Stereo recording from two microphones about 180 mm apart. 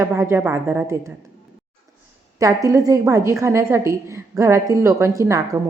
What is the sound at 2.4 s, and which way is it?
A woman's voice, 20° right (ahead or behind).